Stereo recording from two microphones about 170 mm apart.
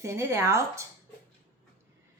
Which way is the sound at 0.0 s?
15° right (ahead or behind).